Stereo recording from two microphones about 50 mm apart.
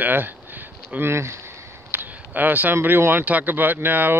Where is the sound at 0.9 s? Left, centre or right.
Right.